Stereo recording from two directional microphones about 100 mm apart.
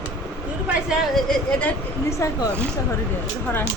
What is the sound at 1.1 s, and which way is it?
Speech, 10° left (ahead or behind).